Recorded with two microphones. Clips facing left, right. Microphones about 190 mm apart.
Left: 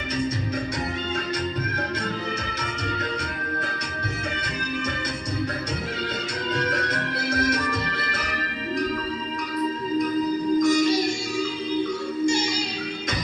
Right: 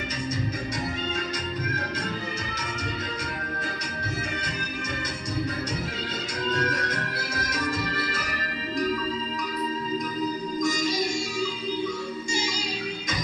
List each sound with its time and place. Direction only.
6.5 s music: 60° left (ahead or behind)
10.6 s music: 60° left (ahead or behind)
12.2 s music: 60° left (ahead or behind)